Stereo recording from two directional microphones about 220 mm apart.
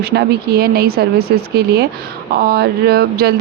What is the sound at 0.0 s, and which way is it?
Speech, 50° right (ahead or behind).